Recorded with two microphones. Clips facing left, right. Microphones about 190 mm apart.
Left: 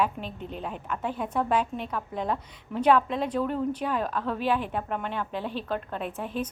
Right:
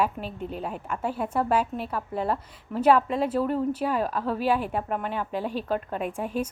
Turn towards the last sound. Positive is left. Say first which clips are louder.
# right 3 dB
turn(degrees=-10)  # may be behind; listen again after turning